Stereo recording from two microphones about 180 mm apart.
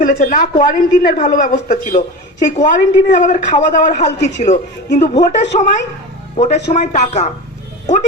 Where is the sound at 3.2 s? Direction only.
45° left (ahead or behind).